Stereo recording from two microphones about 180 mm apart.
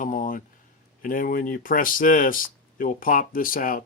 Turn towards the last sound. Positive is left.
turn(degrees=50)  # may be behind; listen again after turning